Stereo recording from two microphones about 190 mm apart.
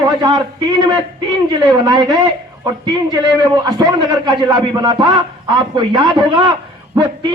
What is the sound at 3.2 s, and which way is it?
A man's voice, 20° right (ahead or behind).